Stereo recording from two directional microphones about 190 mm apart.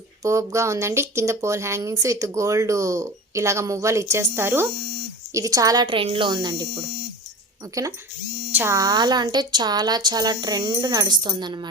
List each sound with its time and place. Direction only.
0.2 s speech: 15° right (ahead or behind)